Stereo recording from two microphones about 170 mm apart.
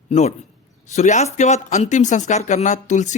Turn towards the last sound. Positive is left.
turn(degrees=45)  # may be behind; listen again after turning